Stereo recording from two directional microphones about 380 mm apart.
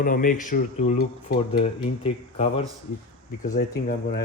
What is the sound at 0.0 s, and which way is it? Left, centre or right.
Speech, left.